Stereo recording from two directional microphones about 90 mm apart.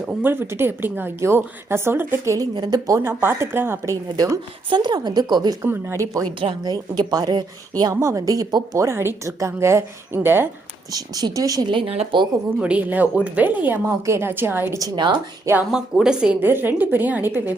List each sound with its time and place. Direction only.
0.2 s a woman's voice: 25° right (ahead or behind)
2.6 s a woman's voice: 45° right (ahead or behind)
3.0 s a woman's voice: 25° right (ahead or behind)
4.7 s a woman's voice: 55° right (ahead or behind)
5.6 s a woman's voice: 25° right (ahead or behind)
6.6 s a woman's voice: 50° right (ahead or behind)
7.9 s a woman's voice: 40° right (ahead or behind)
10.9 s a woman's voice: 45° right (ahead or behind)
11.6 s speech: 65° right (ahead or behind)
12.5 s a woman's voice: 15° right (ahead or behind)
13.8 s a woman's voice: 35° right (ahead or behind)
15.7 s a woman's voice: 10° right (ahead or behind)
16.4 s a woman's voice: 20° right (ahead or behind)